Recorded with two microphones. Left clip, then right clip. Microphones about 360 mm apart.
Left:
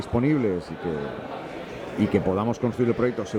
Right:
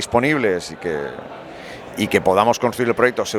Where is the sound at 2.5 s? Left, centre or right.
Right.